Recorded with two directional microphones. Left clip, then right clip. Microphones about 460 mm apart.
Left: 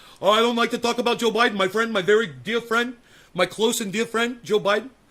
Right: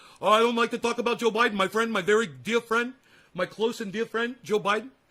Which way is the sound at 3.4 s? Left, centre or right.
Centre.